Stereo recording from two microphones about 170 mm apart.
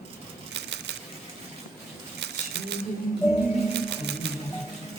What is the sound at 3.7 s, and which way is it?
Music, 90° right.